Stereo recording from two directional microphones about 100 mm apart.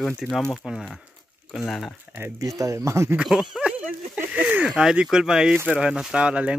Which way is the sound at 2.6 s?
30° right (ahead or behind).